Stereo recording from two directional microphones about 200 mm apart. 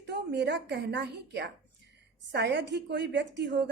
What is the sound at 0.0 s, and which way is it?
A woman's voice, 55° right (ahead or behind).